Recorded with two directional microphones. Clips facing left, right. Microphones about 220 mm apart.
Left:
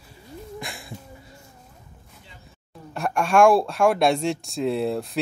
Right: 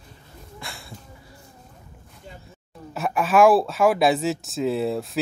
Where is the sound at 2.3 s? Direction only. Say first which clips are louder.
Right 11 dB; 45° right (ahead or behind).